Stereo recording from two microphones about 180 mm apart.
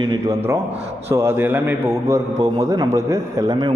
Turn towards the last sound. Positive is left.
turn(degrees=-25)  # may be behind; listen again after turning